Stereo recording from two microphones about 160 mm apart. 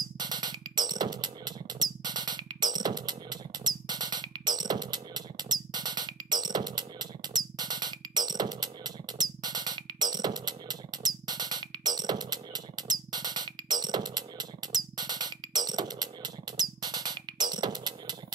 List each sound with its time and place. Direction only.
0.2 s music: 25° right (ahead or behind)